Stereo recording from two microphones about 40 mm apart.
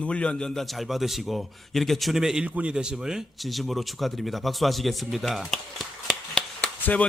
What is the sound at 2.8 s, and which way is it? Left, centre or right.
Speech, centre.